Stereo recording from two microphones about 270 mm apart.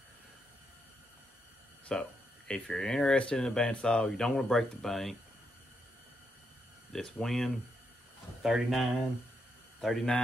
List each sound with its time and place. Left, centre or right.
1.9 s speech: centre
6.9 s speech: centre